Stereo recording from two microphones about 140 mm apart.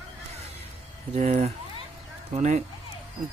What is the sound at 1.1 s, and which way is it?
Speech, 55° right (ahead or behind).